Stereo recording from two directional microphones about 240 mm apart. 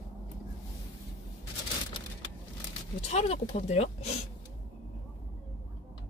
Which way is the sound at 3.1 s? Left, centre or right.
Left.